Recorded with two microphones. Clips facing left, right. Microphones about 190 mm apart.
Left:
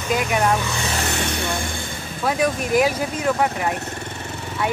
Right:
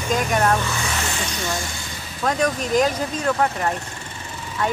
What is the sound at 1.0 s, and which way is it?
Vehicle, 65° left (ahead or behind).